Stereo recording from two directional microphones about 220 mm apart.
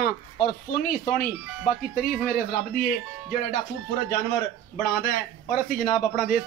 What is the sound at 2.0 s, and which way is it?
Speech, 40° left (ahead or behind).